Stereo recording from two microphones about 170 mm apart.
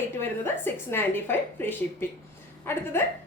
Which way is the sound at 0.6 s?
10° left (ahead or behind).